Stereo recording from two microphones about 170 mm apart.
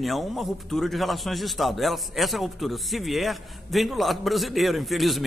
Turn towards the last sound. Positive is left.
turn(degrees=0)  # may be behind; listen again after turning